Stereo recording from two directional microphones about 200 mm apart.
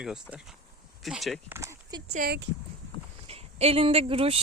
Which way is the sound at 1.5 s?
15° right (ahead or behind).